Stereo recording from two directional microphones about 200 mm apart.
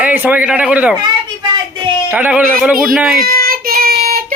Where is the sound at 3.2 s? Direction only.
50° right (ahead or behind).